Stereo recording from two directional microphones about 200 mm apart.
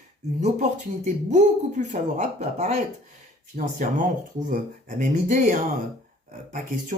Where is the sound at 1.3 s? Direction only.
35° right (ahead or behind).